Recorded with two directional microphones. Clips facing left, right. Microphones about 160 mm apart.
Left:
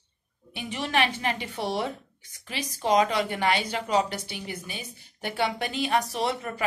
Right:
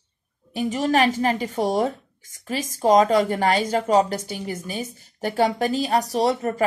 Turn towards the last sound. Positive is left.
turn(degrees=-40)  # may be behind; listen again after turning